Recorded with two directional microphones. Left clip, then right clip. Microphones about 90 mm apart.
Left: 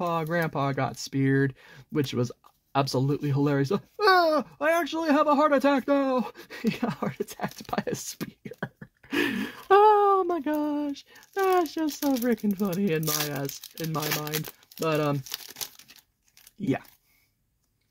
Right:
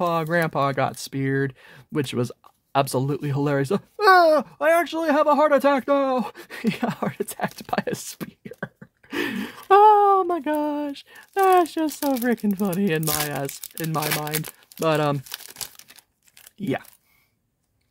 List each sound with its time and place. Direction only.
0.0 s speech: 30° right (ahead or behind)
1.1 s speech: 15° right (ahead or behind)
2.0 s speech: 35° right (ahead or behind)
7.7 s speech: 20° right (ahead or behind)
8.2 s a sound: centre (ahead or behind)
9.7 s speech: 20° right (ahead or behind)
11.8 s speech: 20° right (ahead or behind)
12.2 s speech: 30° right (ahead or behind)
14.8 s speech: 60° right (ahead or behind)
15.2 s speech: 25° right (ahead or behind)